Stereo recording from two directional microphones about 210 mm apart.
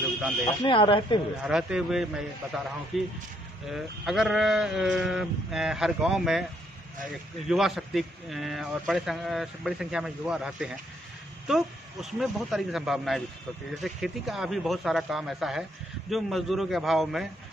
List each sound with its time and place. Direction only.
0.7 s speech: 25° left (ahead or behind)
1.4 s a man's voice: 5° right (ahead or behind)
7.4 s a man's voice: centre (ahead or behind)